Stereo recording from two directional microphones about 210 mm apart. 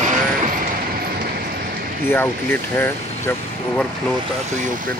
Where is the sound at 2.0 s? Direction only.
10° left (ahead or behind).